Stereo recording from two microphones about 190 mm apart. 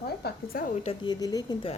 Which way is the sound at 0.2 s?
55° left (ahead or behind).